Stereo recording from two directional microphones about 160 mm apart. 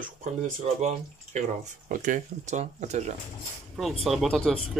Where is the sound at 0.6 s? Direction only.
45° right (ahead or behind).